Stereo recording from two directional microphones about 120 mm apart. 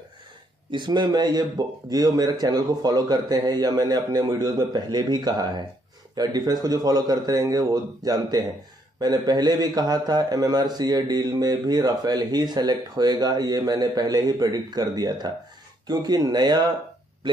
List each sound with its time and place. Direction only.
0.7 s a man's voice: 40° right (ahead or behind)